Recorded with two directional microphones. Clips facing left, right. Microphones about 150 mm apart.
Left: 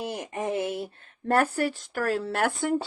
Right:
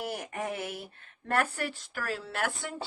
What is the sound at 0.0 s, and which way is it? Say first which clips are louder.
Speech: left 4 dB; 20° left (ahead or behind).